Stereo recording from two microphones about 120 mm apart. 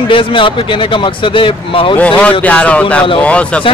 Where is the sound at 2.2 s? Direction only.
10° left (ahead or behind).